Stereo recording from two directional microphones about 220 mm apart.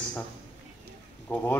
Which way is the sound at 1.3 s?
10° left (ahead or behind).